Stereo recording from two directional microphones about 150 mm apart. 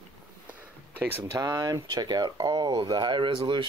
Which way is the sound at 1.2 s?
25° right (ahead or behind).